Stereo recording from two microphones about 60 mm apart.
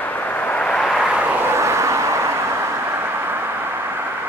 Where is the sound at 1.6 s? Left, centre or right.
Right.